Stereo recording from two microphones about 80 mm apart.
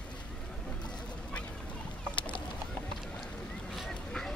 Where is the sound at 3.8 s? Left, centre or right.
Centre.